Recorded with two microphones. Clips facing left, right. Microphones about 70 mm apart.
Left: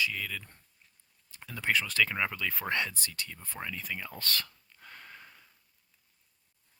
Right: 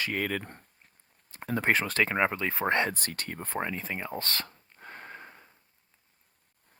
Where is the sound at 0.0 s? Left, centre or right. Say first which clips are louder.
Right 3 dB; right.